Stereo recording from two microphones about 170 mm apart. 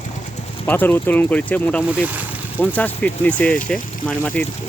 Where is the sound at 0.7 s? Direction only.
10° left (ahead or behind).